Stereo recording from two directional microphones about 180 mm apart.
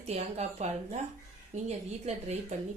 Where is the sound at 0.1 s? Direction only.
35° right (ahead or behind).